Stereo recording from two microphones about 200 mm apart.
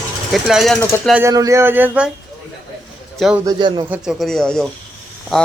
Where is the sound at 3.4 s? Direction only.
20° right (ahead or behind).